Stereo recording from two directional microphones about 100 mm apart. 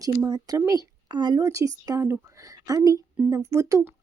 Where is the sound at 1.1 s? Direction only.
45° right (ahead or behind).